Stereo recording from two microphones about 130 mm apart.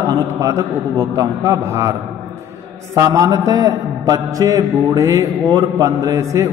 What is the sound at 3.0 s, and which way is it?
Mantra, 25° right (ahead or behind).